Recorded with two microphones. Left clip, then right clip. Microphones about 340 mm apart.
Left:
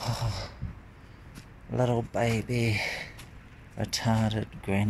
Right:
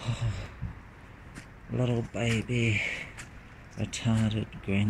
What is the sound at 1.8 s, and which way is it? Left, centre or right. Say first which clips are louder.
Speech: left 4 dB; left.